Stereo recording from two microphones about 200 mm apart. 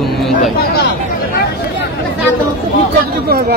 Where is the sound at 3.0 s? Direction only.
50° right (ahead or behind).